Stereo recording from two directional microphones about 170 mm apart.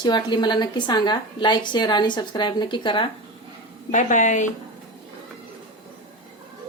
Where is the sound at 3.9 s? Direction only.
45° left (ahead or behind).